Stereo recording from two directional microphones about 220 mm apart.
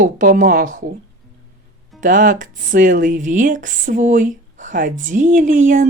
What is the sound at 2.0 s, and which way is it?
Speech, 35° right (ahead or behind).